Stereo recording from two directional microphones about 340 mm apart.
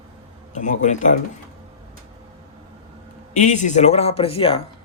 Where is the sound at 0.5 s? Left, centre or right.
Left.